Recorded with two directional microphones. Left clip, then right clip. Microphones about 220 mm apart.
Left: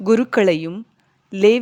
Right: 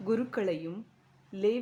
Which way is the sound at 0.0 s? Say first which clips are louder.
Left 15 dB; 40° left (ahead or behind).